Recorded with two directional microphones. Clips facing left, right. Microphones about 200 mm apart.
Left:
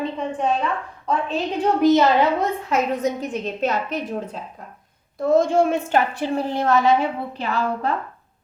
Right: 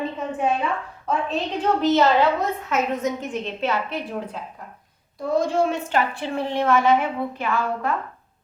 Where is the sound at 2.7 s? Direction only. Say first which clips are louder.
Left 2 dB; 35° left (ahead or behind).